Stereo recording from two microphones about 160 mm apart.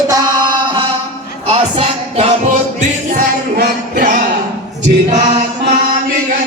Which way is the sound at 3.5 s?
60° right (ahead or behind).